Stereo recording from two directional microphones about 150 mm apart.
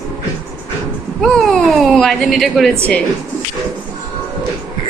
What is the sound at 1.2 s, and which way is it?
Speech, centre (ahead or behind).